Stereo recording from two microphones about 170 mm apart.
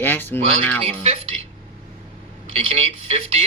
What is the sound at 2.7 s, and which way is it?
Speech, 35° right (ahead or behind).